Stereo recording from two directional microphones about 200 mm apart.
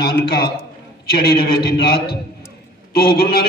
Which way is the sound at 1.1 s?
50° left (ahead or behind).